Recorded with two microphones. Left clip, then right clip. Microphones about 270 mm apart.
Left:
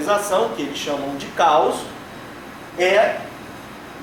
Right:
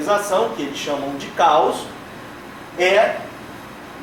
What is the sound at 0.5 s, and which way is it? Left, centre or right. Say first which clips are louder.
Speech: even; centre.